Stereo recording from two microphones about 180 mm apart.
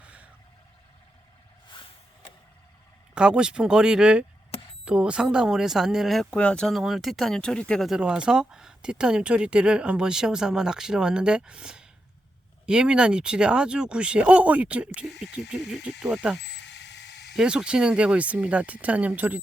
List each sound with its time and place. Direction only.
0.0 s vehicle: 5° right (ahead or behind)
3.2 s speech: 5° right (ahead or behind)
16.4 s a sound: 75° left (ahead or behind)
17.3 s speech: 5° right (ahead or behind)